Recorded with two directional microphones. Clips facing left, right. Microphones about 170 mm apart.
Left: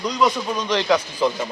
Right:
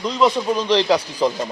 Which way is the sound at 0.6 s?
35° right (ahead or behind).